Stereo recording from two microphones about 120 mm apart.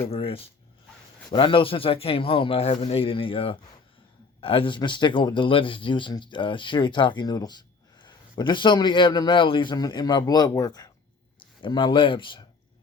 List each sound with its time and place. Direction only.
0.1 s speech: 50° left (ahead or behind)